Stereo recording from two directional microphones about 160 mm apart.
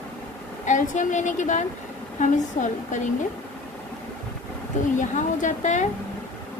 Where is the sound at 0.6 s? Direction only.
50° left (ahead or behind).